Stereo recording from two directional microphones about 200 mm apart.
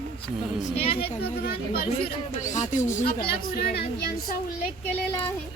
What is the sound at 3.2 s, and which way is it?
A woman's voice, 50° left (ahead or behind).